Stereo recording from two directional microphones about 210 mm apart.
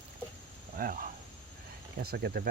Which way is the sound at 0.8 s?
40° right (ahead or behind).